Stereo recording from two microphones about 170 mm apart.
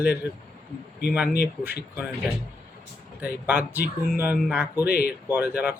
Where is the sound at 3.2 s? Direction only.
10° right (ahead or behind).